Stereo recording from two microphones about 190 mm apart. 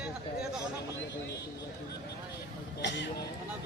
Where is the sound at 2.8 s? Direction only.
70° left (ahead or behind).